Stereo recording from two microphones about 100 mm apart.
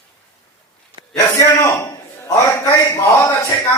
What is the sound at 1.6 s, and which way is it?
A man's voice, 30° left (ahead or behind).